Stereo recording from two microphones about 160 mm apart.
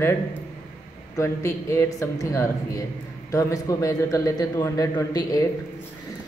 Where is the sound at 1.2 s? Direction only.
15° left (ahead or behind).